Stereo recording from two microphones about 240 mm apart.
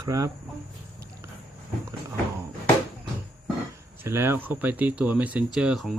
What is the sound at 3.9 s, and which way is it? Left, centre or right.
Speech, centre.